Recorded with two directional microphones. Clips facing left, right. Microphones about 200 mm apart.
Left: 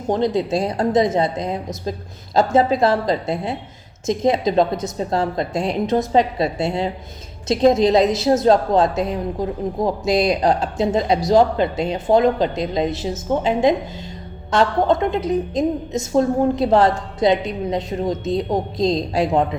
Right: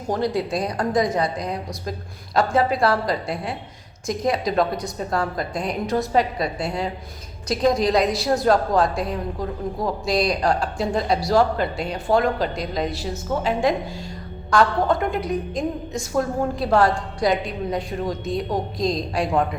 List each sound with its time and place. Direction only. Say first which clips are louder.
0.1 s a woman's voice: left 4 dB; 20° left (ahead or behind)